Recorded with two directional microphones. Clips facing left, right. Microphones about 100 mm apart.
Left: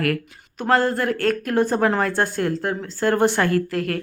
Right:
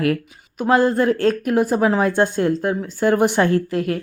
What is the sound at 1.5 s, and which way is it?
Speech, 10° right (ahead or behind).